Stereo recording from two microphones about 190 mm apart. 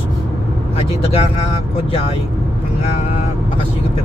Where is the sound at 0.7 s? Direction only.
30° left (ahead or behind).